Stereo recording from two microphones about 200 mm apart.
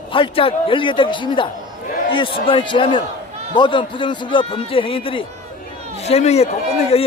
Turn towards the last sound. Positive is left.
turn(degrees=30)  # may be behind; listen again after turning